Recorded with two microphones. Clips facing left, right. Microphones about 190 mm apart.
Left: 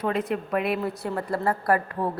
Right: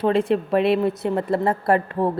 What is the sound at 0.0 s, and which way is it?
A woman's voice, 30° right (ahead or behind).